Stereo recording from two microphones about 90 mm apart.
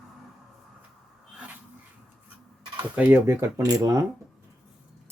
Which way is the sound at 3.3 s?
35° right (ahead or behind).